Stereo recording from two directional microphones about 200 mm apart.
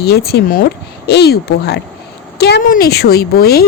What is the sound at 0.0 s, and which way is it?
A woman's voice, 50° left (ahead or behind).